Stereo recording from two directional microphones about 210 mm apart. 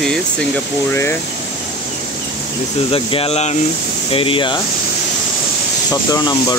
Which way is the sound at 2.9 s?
25° left (ahead or behind).